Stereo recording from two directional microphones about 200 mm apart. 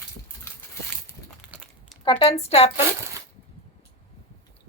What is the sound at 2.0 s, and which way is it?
Speech, 25° left (ahead or behind).